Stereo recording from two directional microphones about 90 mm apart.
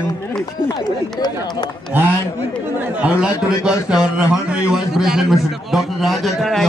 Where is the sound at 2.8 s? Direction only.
15° right (ahead or behind).